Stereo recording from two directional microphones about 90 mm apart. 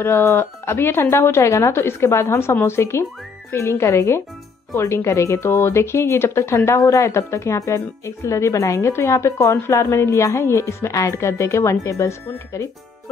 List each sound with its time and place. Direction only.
0.0 s speech: 30° left (ahead or behind)